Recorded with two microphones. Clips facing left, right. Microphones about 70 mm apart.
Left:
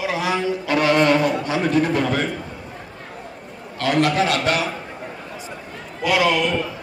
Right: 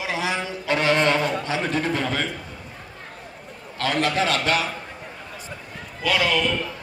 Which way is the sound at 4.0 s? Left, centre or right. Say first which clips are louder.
Left 4 dB; right.